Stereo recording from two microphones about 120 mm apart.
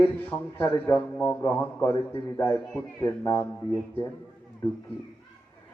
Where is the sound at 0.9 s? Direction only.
15° left (ahead or behind).